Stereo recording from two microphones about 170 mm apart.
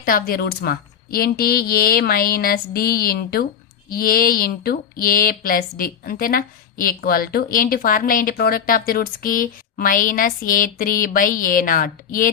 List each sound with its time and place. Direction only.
0.0 s speech: 55° left (ahead or behind)